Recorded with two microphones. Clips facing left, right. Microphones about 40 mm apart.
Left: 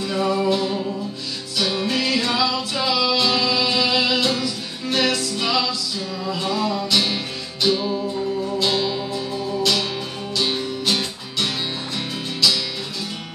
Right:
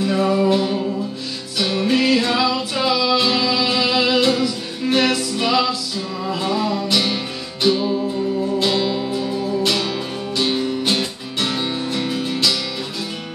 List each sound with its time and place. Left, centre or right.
0.0 s music: centre
10.3 s music: centre